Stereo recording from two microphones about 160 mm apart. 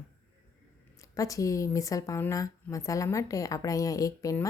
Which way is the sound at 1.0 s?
20° left (ahead or behind).